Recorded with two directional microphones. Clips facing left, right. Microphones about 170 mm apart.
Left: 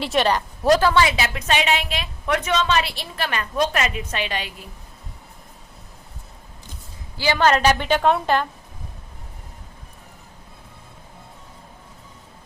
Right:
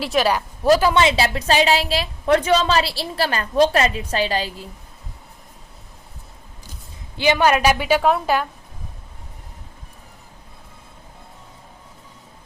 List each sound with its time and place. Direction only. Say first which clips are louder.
0.0 s a woman's voice: right 1 dB; centre (ahead or behind)
0.9 s a woman's voice: right 2 dB; 25° right (ahead or behind)
7.2 s a woman's voice: right 2 dB; 15° right (ahead or behind)